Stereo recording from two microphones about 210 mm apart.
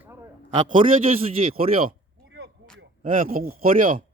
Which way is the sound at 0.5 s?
30° right (ahead or behind).